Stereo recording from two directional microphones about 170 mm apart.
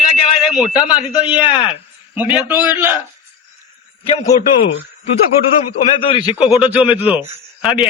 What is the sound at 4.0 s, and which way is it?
Speech, 35° left (ahead or behind).